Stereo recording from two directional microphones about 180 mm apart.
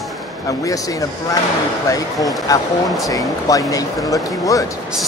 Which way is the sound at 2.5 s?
20° left (ahead or behind).